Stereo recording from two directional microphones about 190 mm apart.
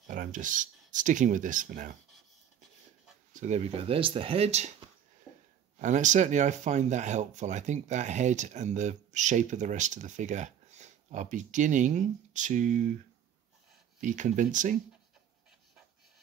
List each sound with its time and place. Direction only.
0.0 s speech: 40° right (ahead or behind)
3.3 s speech: 35° right (ahead or behind)
5.8 s speech: 40° right (ahead or behind)
14.0 s speech: 40° right (ahead or behind)